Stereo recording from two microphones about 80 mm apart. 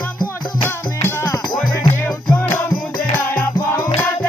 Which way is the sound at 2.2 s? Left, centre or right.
Centre.